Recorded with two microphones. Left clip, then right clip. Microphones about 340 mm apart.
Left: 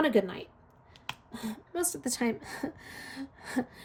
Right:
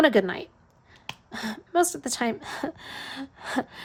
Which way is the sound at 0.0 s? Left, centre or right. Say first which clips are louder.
Right 6 dB; centre.